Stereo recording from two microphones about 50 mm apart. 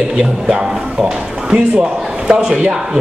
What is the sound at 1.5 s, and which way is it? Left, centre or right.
Speech, centre.